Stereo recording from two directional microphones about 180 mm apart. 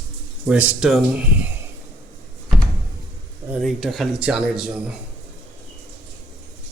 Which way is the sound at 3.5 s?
Centre (ahead or behind).